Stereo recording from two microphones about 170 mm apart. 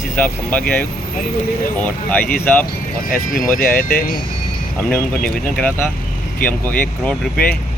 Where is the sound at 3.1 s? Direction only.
55° left (ahead or behind).